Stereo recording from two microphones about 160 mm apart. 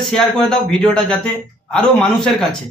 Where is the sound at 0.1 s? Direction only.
5° left (ahead or behind).